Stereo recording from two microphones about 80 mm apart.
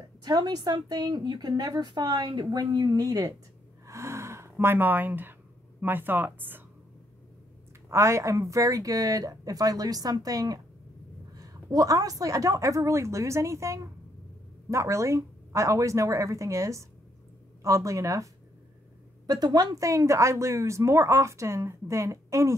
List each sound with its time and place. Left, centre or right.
0.2 s a woman's voice: right
3.8 s gasp: right
5.8 s speech: right
7.9 s a woman's voice: right
19.2 s a woman's voice: right